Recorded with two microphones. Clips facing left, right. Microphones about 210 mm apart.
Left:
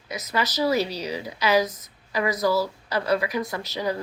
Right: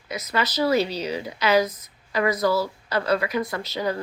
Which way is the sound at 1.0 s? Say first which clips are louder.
Right 1 dB; 15° left (ahead or behind).